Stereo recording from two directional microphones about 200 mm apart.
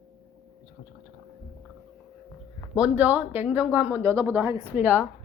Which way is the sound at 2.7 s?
5° right (ahead or behind).